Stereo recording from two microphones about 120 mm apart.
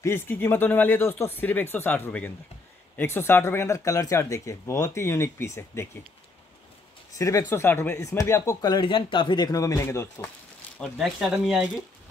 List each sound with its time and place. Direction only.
0.0 s speech: 20° left (ahead or behind)
7.2 s speech: 25° left (ahead or behind)
11.0 s speech: centre (ahead or behind)